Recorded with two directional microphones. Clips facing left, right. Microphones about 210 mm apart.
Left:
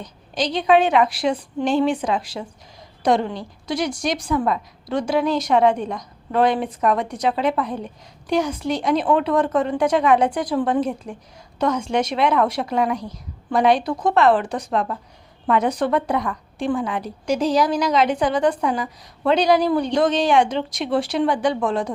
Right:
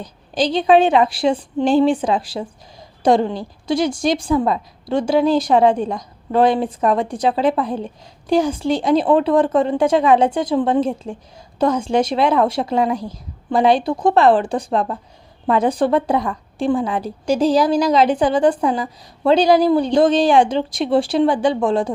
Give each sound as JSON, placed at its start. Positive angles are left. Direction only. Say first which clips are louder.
{"t": 0.0, "sound": "a woman's voice", "louder": "right 5 dB", "side_deg": -30}